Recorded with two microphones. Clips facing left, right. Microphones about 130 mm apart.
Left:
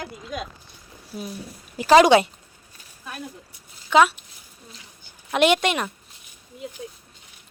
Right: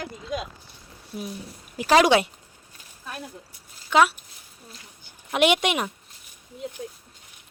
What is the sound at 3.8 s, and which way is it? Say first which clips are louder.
Speech: left 2 dB; 5° right (ahead or behind).